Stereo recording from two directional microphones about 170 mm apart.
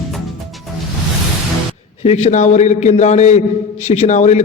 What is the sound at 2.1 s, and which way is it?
A man's voice, 40° left (ahead or behind).